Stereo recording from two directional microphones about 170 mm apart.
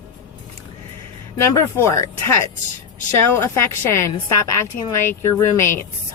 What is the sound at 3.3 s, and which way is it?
A woman's voice, 15° left (ahead or behind).